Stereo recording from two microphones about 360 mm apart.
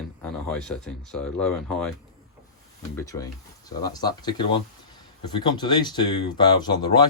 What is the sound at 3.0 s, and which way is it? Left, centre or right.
Speech, centre.